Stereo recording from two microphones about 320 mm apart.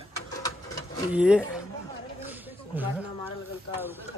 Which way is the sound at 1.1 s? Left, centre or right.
Centre.